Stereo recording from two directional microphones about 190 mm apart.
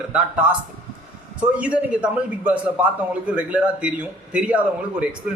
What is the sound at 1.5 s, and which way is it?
A man's voice, 5° right (ahead or behind).